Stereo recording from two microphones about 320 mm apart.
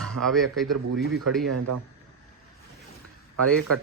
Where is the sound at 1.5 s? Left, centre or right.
Right.